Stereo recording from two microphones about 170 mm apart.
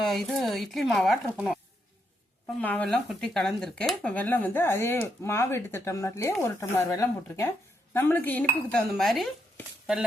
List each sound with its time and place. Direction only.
0.0 s speech: centre (ahead or behind)
2.6 s speech: 10° left (ahead or behind)